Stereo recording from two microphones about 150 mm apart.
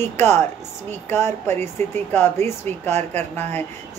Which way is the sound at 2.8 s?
50° right (ahead or behind).